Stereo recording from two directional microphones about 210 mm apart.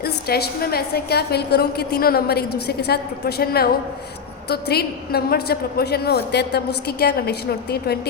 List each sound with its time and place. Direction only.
0.0 s a woman's voice: 50° left (ahead or behind)